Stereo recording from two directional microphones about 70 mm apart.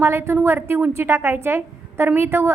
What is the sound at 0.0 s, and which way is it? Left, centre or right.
A woman's voice, right.